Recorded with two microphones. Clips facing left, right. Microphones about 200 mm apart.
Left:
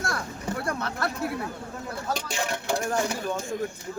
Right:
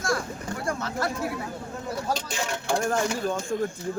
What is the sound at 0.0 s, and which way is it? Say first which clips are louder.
Boat: right 4 dB; 60° left (ahead or behind).